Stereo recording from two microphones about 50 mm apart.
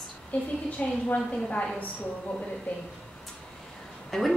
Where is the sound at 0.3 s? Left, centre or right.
Left.